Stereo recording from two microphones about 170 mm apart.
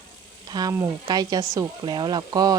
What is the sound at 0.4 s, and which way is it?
Speech, 25° right (ahead or behind).